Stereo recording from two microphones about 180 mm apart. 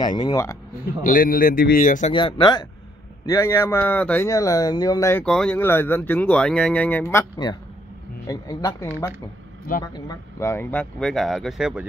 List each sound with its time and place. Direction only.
0.0 s speech: 20° left (ahead or behind)
1.0 s speech: 50° left (ahead or behind)
2.1 s speech: 25° left (ahead or behind)
5.2 s speech: 5° left (ahead or behind); by 8.8 s 20° left (ahead or behind)
9.9 s speech: 15° left (ahead or behind); by 11.8 s 5° right (ahead or behind)